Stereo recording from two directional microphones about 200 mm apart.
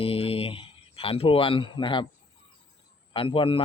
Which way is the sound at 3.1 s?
25° left (ahead or behind).